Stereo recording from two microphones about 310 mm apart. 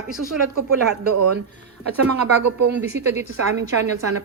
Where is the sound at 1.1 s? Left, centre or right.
Right.